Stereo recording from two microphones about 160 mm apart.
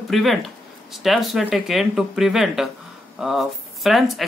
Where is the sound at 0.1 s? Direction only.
Centre (ahead or behind).